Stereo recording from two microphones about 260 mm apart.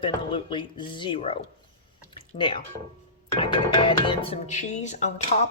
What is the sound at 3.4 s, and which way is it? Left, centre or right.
Speech, centre.